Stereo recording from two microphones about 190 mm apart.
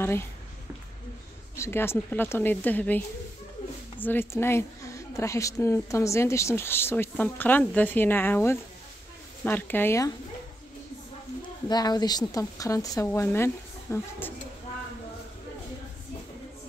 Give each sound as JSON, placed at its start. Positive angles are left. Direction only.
{"t": 1.6, "sound": "a woman's voice", "side_deg": 10}
{"t": 4.0, "sound": "a woman's voice", "side_deg": 10}
{"t": 11.7, "sound": "a woman's voice", "side_deg": 20}